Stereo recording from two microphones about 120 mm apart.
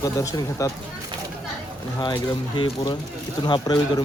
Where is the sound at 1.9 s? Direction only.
35° left (ahead or behind).